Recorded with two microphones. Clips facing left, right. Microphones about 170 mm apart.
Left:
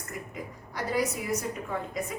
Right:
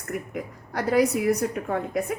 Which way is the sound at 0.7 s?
65° right (ahead or behind).